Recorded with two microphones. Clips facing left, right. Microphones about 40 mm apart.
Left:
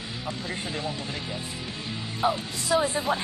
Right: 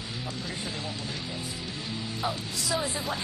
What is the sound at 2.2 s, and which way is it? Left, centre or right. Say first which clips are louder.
Speech: left 7 dB; left.